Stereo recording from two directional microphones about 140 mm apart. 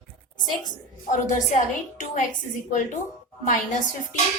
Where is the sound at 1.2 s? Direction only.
65° left (ahead or behind).